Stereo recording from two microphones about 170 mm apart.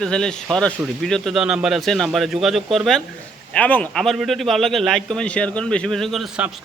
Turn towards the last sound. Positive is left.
turn(degrees=-5)  # may be behind; listen again after turning